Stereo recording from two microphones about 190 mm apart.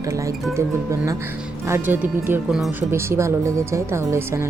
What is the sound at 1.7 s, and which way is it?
Speech, 10° right (ahead or behind).